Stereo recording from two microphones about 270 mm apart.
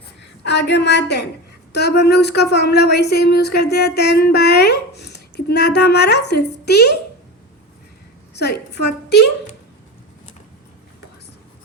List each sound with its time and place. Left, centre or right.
0.2 s a woman's voice: left
8.3 s a woman's voice: left